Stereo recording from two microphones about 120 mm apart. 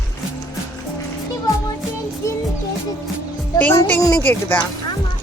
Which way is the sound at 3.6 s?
15° left (ahead or behind).